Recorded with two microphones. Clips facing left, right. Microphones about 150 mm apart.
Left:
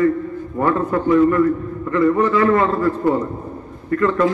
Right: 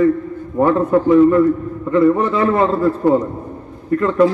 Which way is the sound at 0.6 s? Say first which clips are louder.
Right 5 dB; 20° right (ahead or behind).